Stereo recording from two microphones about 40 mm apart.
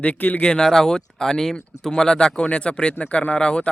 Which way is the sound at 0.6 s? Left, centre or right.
Centre.